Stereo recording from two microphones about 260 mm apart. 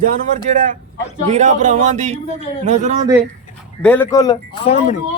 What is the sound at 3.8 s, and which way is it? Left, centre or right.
Speech, centre.